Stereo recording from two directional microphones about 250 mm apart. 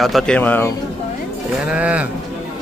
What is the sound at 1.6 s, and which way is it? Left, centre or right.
Speech, centre.